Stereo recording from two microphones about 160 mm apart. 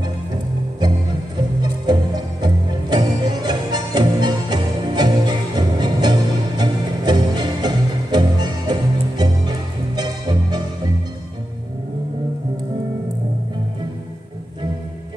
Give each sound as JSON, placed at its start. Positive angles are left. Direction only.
{"t": 1.6, "sound": "music", "side_deg": -25}